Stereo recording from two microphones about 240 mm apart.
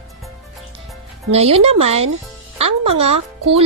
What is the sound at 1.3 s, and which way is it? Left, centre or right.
Speech, right.